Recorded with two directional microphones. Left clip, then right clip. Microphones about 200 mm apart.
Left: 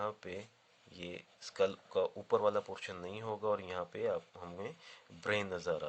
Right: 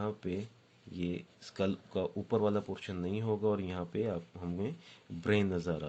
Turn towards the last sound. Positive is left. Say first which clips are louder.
# right 3 dB
turn(degrees=15)  # may be behind; listen again after turning